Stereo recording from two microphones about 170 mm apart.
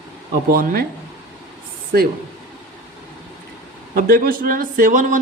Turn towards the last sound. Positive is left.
turn(degrees=-50)  # may be behind; listen again after turning